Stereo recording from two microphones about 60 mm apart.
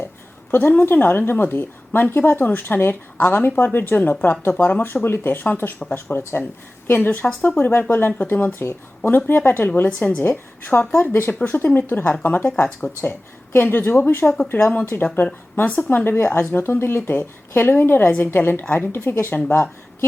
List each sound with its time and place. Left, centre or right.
0.5 s a woman's voice: left
15.9 s a woman's voice: left